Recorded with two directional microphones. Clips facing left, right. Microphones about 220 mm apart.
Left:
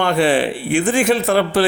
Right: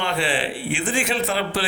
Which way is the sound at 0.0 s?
45° left (ahead or behind).